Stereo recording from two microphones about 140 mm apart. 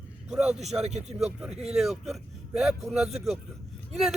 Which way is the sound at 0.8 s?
55° right (ahead or behind).